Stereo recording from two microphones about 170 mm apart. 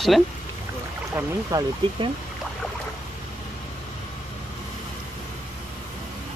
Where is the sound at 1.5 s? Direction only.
20° right (ahead or behind).